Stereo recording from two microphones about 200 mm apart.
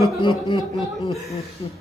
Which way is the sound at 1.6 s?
20° left (ahead or behind).